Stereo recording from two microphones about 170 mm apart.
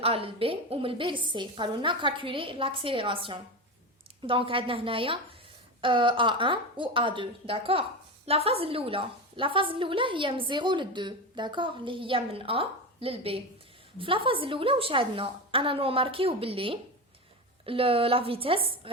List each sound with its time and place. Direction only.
0.0 s a woman's voice: 35° right (ahead or behind)